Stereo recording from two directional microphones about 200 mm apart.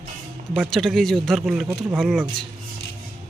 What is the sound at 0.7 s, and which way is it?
Speech, centre (ahead or behind).